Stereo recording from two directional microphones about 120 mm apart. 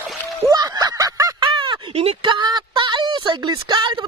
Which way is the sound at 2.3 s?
40° right (ahead or behind).